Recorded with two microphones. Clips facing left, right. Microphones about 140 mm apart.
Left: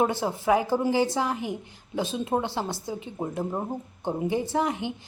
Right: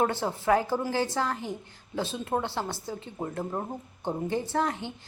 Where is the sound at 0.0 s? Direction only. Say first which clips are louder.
Left 2 dB; 15° left (ahead or behind).